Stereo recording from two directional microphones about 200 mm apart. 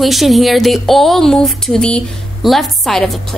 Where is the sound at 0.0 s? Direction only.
Centre (ahead or behind).